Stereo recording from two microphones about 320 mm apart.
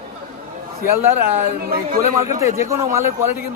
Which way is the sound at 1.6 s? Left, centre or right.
Right.